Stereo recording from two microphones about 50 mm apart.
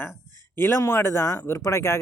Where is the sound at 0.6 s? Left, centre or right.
Left.